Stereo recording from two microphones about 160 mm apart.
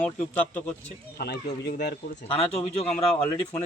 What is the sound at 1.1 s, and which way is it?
Speech, 90° left.